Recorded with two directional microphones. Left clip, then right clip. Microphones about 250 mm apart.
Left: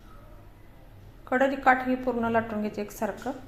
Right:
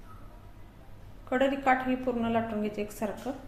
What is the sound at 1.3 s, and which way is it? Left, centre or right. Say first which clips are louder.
A woman's voice: left 3 dB; centre.